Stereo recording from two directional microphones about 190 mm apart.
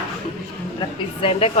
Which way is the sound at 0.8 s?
30° left (ahead or behind).